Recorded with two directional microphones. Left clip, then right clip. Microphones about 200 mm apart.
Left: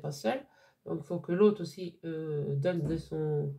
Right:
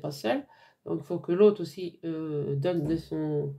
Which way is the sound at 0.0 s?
35° right (ahead or behind).